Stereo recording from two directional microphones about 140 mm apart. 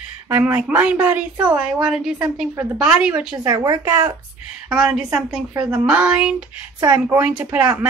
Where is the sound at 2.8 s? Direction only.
5° right (ahead or behind).